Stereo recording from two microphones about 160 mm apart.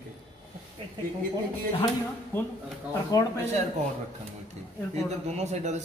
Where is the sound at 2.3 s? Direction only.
15° left (ahead or behind).